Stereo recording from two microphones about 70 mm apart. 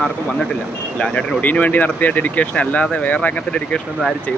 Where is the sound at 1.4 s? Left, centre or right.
Left.